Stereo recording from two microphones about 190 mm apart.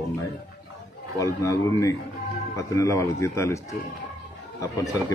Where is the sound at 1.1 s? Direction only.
15° left (ahead or behind).